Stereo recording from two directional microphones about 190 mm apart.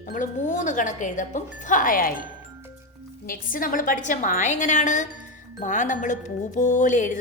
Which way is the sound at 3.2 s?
45° left (ahead or behind).